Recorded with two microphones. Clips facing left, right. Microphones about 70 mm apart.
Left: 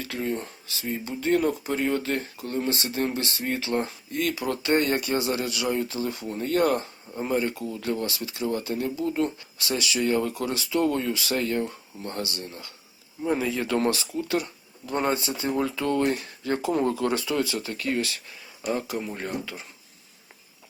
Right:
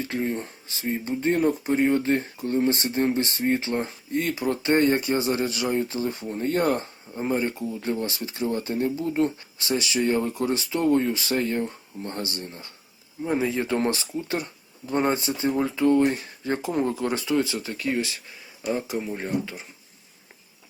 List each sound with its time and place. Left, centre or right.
0.0 s speech: right